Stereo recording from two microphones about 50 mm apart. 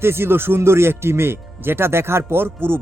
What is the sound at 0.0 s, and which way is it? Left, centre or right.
Speech, right.